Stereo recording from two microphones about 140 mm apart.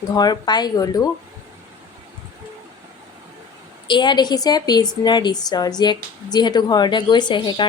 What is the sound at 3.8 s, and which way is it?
A woman's voice, 35° left (ahead or behind).